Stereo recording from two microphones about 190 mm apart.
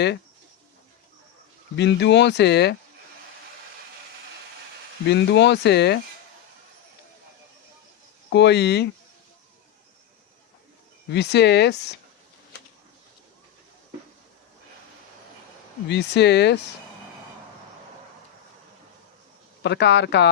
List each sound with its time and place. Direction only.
1.7 s speech: 65° left (ahead or behind)
5.0 s speech: 65° left (ahead or behind)
8.3 s speech: 65° left (ahead or behind)
11.1 s speech: 60° left (ahead or behind)
15.9 s speech: 65° left (ahead or behind)
19.6 s speech: 65° left (ahead or behind)